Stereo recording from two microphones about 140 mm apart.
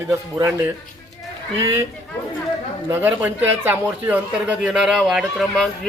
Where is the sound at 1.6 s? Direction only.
20° right (ahead or behind).